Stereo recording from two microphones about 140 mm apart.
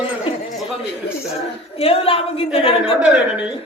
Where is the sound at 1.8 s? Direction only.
45° left (ahead or behind).